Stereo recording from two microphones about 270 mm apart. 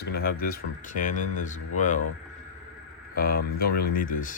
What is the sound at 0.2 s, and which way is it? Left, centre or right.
Speech, left.